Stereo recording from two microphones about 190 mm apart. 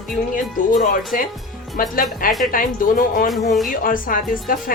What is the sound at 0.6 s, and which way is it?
A woman's voice, 45° left (ahead or behind).